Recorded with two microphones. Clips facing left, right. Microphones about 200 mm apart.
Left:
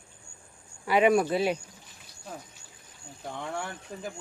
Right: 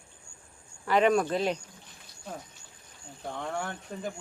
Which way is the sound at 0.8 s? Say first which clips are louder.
Left 1 dB; 10° left (ahead or behind).